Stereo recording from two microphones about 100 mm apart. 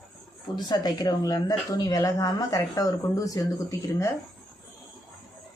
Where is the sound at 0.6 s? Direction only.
45° left (ahead or behind).